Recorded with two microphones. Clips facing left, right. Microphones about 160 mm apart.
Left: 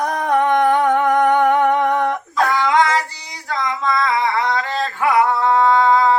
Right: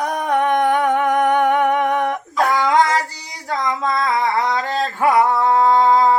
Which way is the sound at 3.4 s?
35° right (ahead or behind).